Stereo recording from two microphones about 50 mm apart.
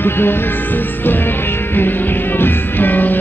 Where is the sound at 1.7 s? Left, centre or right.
Left.